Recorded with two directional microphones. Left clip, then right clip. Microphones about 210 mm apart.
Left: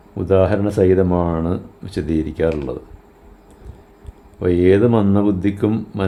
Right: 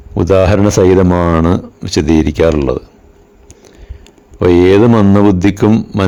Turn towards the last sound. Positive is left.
turn(degrees=-30)  # may be behind; listen again after turning